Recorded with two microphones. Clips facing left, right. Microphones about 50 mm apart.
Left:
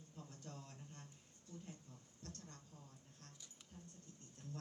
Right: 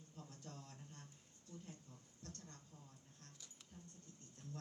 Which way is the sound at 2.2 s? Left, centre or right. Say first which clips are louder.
Left 1 dB; right.